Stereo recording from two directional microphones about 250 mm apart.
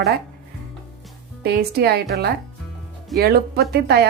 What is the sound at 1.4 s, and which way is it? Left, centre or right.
A woman's voice, right.